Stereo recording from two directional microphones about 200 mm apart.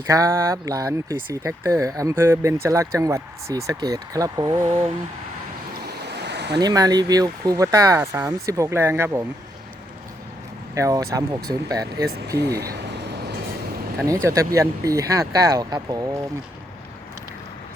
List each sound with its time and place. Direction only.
0.1 s speech: 15° right (ahead or behind)
5.8 s a sound: 55° right (ahead or behind)
6.6 s speech: 20° right (ahead or behind)
10.8 s speech: 15° right (ahead or behind)
14.0 s speech: 15° right (ahead or behind)